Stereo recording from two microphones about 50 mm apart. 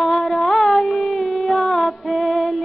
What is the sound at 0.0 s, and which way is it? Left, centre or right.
Child singing, centre.